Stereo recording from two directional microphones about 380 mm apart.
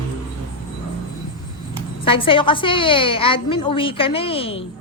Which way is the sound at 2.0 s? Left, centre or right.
Centre.